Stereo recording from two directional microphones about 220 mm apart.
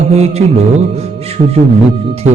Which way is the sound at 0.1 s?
30° right (ahead or behind).